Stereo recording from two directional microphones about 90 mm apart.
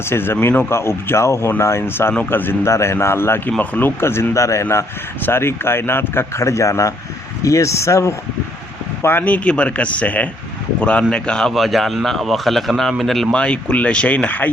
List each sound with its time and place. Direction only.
0.0 s speech: 25° left (ahead or behind)
9.0 s a man's voice: 25° left (ahead or behind); by 13.2 s centre (ahead or behind)
13.3 s a man's voice: 15° left (ahead or behind)